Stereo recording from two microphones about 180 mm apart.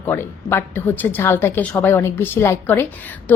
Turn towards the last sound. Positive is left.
turn(degrees=10)  # may be behind; listen again after turning